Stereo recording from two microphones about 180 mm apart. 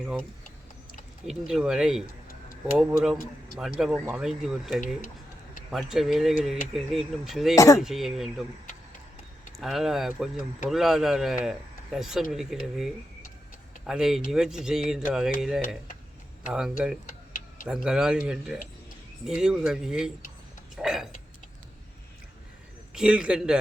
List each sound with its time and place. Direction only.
1.3 s speech: centre (ahead or behind)
7.5 s speech: 15° left (ahead or behind)
7.8 s speech: centre (ahead or behind)
9.6 s speech: centre (ahead or behind)
17.1 s tick-tock: 45° left (ahead or behind)
17.7 s speech: 5° right (ahead or behind)
20.7 s a sound: 5° right (ahead or behind)
23.0 s speech: 5° right (ahead or behind)